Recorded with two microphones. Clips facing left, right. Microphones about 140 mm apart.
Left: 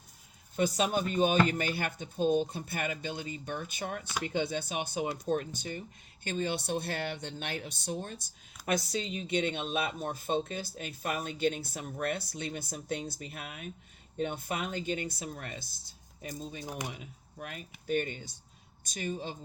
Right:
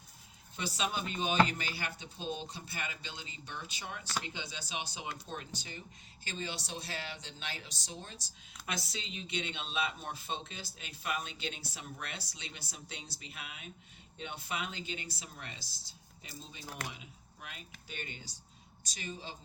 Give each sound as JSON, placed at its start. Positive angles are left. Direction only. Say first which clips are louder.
{"t": 0.5, "sound": "speech", "louder": "left 8 dB", "side_deg": 50}